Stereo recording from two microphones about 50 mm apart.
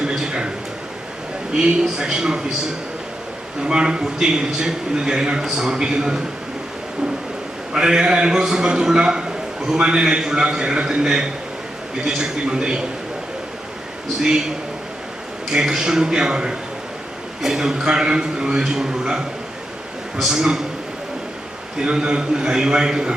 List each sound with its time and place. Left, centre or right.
0.0 s a sound: centre
1.5 s a man's voice: centre
3.6 s a man's voice: centre
7.7 s a man's voice: centre
14.2 s a man's voice: centre
15.5 s a man's voice: centre
21.8 s a man's voice: centre